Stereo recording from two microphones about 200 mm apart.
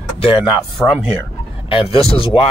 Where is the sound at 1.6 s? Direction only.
25° left (ahead or behind).